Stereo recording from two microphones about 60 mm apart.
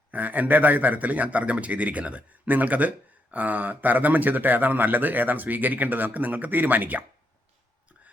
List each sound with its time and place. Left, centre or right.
0.1 s a man's voice: right